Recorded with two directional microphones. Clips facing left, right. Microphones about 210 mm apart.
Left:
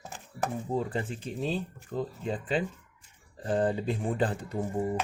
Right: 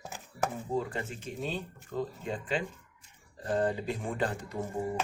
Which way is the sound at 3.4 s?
30° left (ahead or behind).